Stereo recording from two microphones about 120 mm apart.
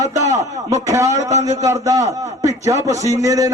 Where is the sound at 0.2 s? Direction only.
25° right (ahead or behind).